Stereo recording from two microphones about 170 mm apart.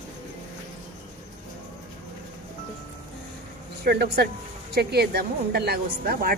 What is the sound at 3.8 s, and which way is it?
A woman's voice, 70° right (ahead or behind).